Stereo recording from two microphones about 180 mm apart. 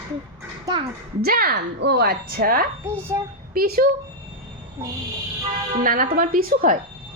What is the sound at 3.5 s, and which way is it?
Speech, 55° right (ahead or behind).